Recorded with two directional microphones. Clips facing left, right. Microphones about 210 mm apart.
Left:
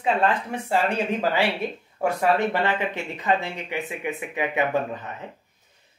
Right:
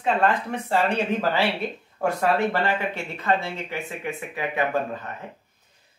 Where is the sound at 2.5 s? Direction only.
20° left (ahead or behind).